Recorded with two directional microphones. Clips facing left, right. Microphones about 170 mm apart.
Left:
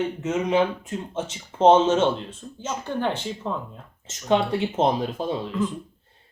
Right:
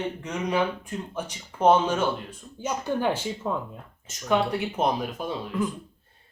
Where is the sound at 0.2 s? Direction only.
25° left (ahead or behind).